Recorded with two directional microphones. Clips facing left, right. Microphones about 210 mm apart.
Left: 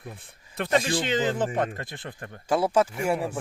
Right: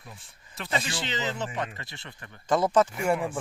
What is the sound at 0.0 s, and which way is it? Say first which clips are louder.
Speech: left 7 dB; 55° left (ahead or behind).